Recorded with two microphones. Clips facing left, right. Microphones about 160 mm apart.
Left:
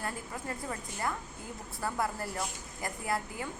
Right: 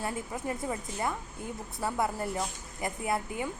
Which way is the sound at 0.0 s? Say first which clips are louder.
Right 4 dB; 20° right (ahead or behind).